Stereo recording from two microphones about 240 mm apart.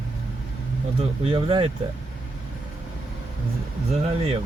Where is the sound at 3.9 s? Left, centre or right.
Right.